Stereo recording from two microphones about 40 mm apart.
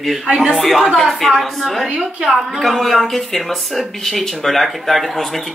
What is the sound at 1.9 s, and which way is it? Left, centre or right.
Speech, right.